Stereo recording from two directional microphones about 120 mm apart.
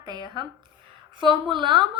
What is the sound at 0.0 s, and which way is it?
A woman's voice, 35° right (ahead or behind).